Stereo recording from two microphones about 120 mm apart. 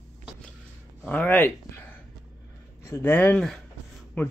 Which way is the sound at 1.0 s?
10° left (ahead or behind).